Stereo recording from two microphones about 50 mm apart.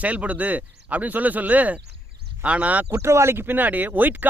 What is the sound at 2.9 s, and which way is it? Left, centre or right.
Speech, right.